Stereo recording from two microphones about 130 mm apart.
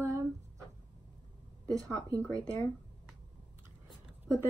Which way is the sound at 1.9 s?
25° right (ahead or behind).